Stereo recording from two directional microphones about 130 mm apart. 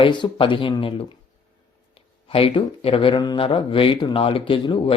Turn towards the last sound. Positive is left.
turn(degrees=40)  # may be behind; listen again after turning